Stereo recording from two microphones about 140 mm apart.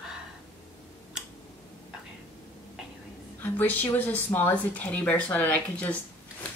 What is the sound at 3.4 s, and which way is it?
Speech, 15° left (ahead or behind).